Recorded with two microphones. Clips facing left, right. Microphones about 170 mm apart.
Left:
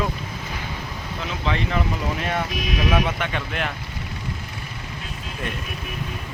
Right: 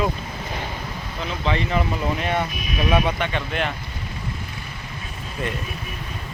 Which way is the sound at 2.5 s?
90° left.